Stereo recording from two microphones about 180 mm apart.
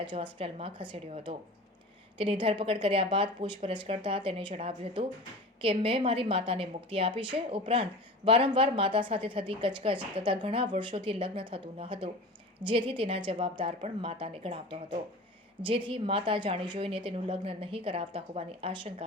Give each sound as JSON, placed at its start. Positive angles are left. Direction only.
{"t": 0.0, "sound": "a woman's voice", "side_deg": -25}